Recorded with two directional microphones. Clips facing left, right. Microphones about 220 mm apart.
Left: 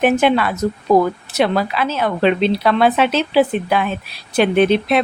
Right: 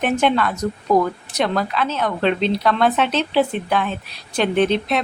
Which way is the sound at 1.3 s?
5° left (ahead or behind).